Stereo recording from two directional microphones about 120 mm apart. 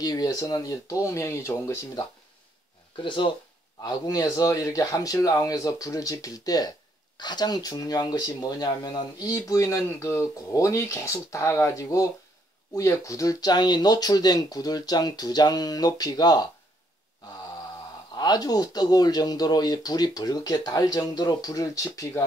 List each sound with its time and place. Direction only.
0.0 s speech: 35° left (ahead or behind)
3.0 s speech: 45° left (ahead or behind)
3.8 s speech: 30° left (ahead or behind)
18.1 s speech: 35° left (ahead or behind)